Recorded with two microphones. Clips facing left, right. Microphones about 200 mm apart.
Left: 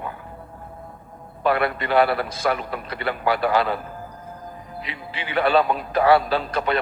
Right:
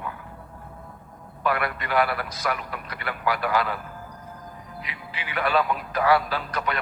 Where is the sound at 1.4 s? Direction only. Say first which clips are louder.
Left 5 dB; 30° left (ahead or behind).